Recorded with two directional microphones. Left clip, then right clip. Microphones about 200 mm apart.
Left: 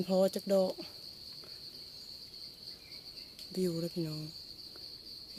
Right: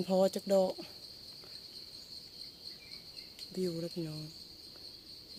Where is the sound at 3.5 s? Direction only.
30° left (ahead or behind).